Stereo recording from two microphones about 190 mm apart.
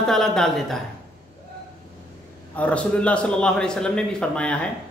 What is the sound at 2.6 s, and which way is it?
Speech, 5° left (ahead or behind).